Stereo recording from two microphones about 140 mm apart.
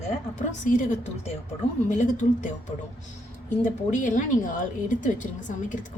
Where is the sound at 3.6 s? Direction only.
65° left (ahead or behind).